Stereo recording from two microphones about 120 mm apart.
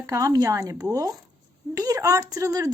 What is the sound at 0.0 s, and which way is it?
A woman's voice, 30° right (ahead or behind).